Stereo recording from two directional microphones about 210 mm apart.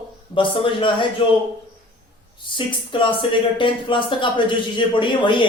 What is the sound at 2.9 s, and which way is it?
Speech, 25° left (ahead or behind).